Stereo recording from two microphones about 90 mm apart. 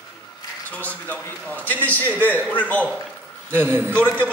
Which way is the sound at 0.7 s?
20° left (ahead or behind).